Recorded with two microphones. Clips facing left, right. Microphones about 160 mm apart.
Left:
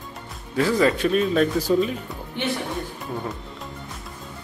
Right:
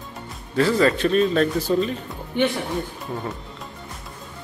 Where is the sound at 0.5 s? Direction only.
10° left (ahead or behind).